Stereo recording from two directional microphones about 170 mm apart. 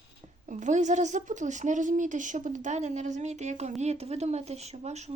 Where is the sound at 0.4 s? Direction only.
45° right (ahead or behind).